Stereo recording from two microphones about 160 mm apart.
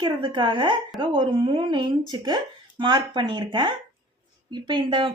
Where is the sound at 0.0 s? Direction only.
30° right (ahead or behind).